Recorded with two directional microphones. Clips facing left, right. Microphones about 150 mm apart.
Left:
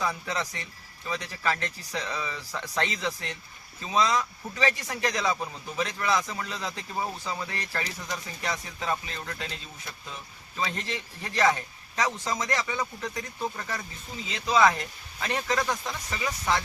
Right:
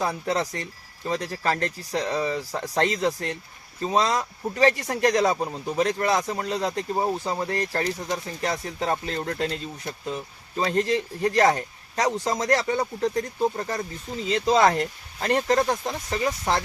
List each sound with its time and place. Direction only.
0.0 s speech: 40° right (ahead or behind)
8.1 s speech: 45° right (ahead or behind)